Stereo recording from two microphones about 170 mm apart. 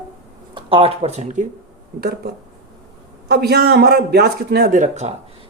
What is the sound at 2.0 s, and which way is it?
Speech, 70° right (ahead or behind).